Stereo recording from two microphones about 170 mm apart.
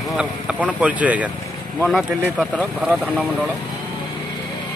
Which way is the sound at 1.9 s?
Centre (ahead or behind).